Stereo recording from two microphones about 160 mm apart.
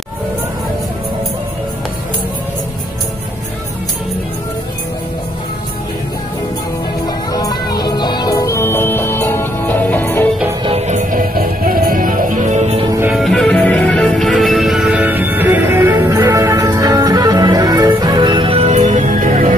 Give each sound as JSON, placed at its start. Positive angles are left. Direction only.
{"t": 7.3, "sound": "music", "side_deg": 25}
{"t": 10.6, "sound": "music", "side_deg": -40}
{"t": 13.1, "sound": "music", "side_deg": 0}